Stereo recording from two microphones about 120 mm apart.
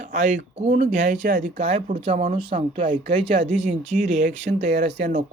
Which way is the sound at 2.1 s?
90° right.